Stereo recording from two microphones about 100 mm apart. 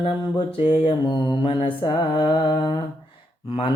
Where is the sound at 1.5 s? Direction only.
60° left (ahead or behind).